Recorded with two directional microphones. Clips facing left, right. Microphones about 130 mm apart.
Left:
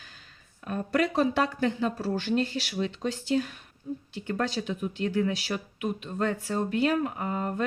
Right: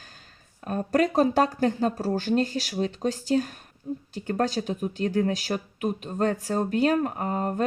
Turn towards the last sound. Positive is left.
turn(degrees=-40)  # may be behind; listen again after turning